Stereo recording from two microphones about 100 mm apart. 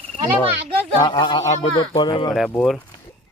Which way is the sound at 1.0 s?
50° left (ahead or behind).